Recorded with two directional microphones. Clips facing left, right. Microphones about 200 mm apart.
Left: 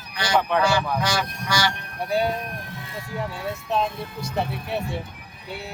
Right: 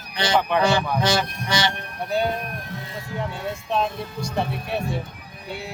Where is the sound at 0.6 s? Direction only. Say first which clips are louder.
Right 2 dB; 25° right (ahead or behind).